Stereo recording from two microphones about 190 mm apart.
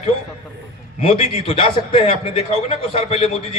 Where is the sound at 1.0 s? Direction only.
30° left (ahead or behind).